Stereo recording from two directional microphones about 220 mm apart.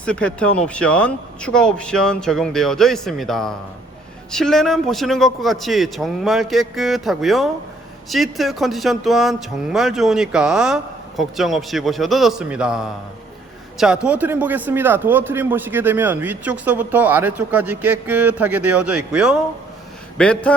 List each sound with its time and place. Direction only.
0.0 s a man's voice: 5° left (ahead or behind)